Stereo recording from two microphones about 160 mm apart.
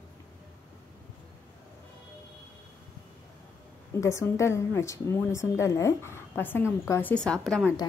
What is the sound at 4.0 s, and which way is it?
A woman's voice, 20° left (ahead or behind).